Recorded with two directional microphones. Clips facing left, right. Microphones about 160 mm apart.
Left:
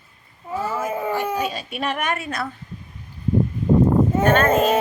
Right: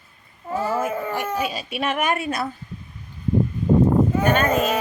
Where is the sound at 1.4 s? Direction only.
10° right (ahead or behind).